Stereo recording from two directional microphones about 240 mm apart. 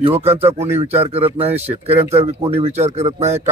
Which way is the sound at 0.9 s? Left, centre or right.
Right.